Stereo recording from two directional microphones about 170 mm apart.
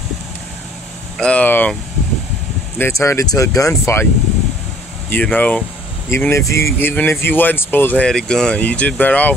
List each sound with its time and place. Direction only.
1.1 s vehicle: 5° left (ahead or behind)
2.8 s speech: 15° left (ahead or behind)
5.1 s speech: 10° left (ahead or behind)